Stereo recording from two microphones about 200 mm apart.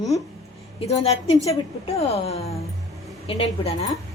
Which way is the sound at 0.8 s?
30° left (ahead or behind).